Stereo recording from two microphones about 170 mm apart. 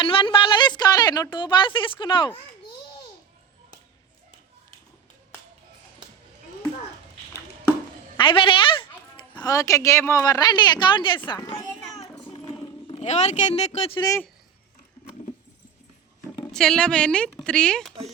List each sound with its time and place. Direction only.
0.0 s a woman's voice: 30° left (ahead or behind)
8.2 s speech: 30° left (ahead or behind)
12.3 s clip-clop: 30° left (ahead or behind)
16.5 s a woman's voice: 5° left (ahead or behind)